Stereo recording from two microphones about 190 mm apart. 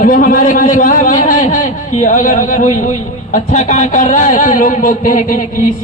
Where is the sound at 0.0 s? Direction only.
45° left (ahead or behind).